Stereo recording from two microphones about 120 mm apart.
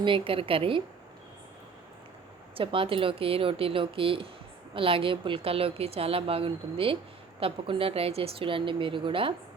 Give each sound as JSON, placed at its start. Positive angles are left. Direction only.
{"t": 0.0, "sound": "a woman's voice", "side_deg": -45}
{"t": 2.6, "sound": "a woman's voice", "side_deg": -50}